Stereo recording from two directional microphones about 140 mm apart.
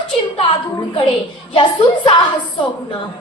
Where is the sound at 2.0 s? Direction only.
35° left (ahead or behind).